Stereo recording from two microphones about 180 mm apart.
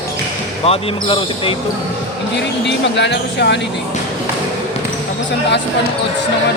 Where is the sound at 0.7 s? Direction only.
30° left (ahead or behind).